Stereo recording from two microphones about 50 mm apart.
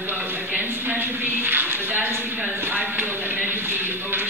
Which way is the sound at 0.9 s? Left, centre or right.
Right.